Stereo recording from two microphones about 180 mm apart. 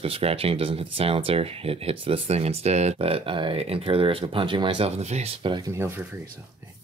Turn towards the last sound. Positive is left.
turn(degrees=-15)  # may be behind; listen again after turning